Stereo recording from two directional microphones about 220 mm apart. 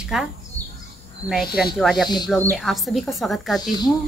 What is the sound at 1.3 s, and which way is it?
Speech, centre (ahead or behind).